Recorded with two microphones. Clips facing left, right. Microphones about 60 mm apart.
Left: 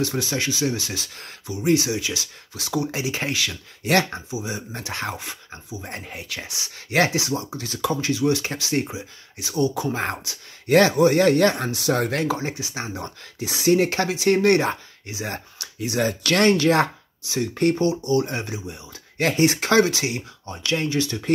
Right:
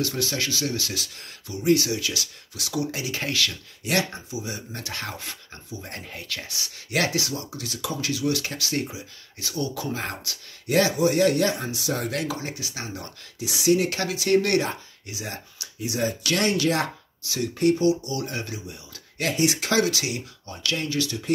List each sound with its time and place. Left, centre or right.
0.0 s speech: left
3.8 s speech: left
4.3 s speech: left
10.7 s speech: left
12.1 s speech: left
13.4 s speech: left
15.3 s speech: left
16.3 s speech: left
17.2 s speech: left
17.6 s speech: left
19.2 s speech: left